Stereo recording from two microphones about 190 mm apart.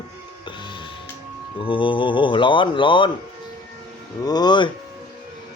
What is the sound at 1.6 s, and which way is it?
Speech, 25° left (ahead or behind).